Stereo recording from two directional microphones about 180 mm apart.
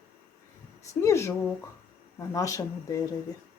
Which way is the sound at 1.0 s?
15° left (ahead or behind).